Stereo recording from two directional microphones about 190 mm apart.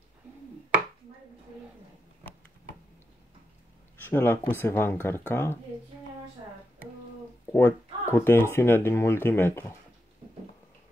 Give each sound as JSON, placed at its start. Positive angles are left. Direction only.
{"t": 4.0, "sound": "speech", "side_deg": 10}
{"t": 7.5, "sound": "speech", "side_deg": 10}